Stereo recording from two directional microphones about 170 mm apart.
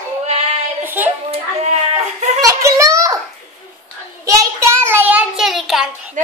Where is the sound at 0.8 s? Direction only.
10° right (ahead or behind).